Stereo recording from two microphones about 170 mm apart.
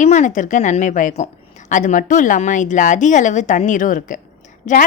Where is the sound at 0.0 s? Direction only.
45° left (ahead or behind).